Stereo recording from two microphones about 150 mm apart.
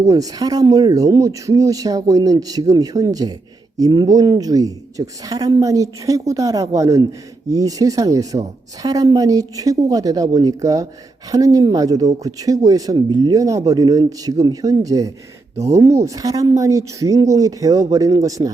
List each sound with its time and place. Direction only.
0.0 s speech: 25° right (ahead or behind)